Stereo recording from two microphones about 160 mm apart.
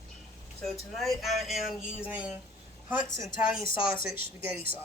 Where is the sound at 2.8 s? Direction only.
15° right (ahead or behind).